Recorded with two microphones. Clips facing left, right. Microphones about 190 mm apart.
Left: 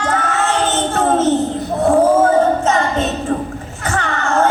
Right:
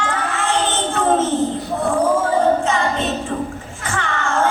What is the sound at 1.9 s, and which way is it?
Music, 40° left (ahead or behind).